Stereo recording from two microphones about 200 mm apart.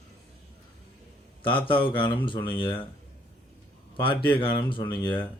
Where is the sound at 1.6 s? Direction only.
25° left (ahead or behind).